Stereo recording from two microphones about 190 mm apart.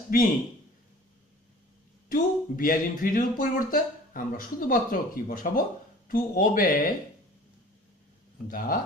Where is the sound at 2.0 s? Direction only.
45° left (ahead or behind).